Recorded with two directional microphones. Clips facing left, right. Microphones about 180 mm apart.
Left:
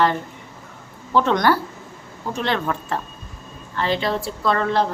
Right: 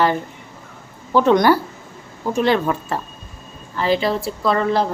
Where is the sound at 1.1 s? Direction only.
10° right (ahead or behind).